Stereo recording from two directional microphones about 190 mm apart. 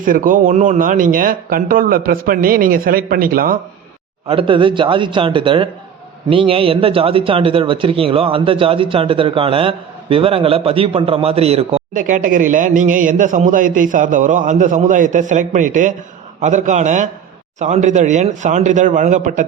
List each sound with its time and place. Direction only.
0.0 s a man's voice: 45° right (ahead or behind)
4.3 s a man's voice: 25° right (ahead or behind)